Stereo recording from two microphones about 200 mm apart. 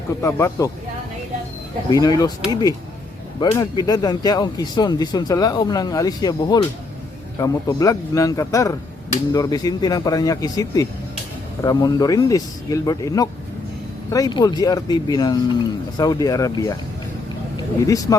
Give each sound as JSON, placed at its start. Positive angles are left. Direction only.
{"t": 0.2, "sound": "a man's voice", "side_deg": 15}
{"t": 1.9, "sound": "a man's voice", "side_deg": 20}
{"t": 17.8, "sound": "a man's voice", "side_deg": 15}